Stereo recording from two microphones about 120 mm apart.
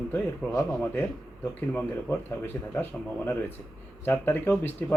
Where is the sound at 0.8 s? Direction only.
15° left (ahead or behind).